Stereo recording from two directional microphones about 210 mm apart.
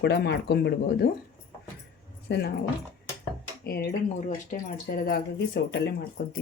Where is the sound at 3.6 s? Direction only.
50° left (ahead or behind).